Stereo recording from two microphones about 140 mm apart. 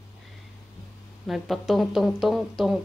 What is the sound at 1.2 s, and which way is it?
Dishes, centre (ahead or behind).